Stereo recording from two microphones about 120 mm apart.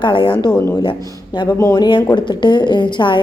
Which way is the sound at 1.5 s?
30° left (ahead or behind).